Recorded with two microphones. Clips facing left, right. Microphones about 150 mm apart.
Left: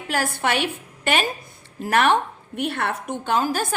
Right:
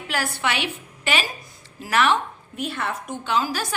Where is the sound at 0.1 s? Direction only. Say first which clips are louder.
Left 3 dB; 50° left (ahead or behind).